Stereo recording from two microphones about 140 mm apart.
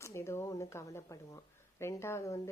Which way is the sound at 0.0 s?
20° left (ahead or behind).